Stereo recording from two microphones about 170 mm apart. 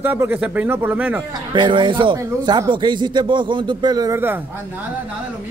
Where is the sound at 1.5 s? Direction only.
30° right (ahead or behind).